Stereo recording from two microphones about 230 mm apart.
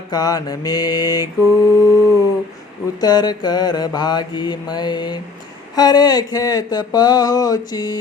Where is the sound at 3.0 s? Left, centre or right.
Centre.